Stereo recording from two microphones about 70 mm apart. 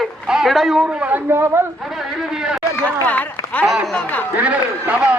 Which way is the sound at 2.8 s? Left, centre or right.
Left.